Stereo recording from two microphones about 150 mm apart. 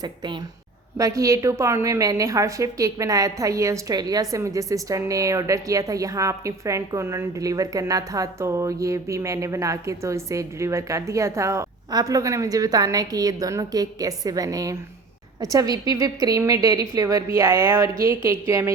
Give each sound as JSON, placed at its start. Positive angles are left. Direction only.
{"t": 0.9, "sound": "a woman's voice", "side_deg": -20}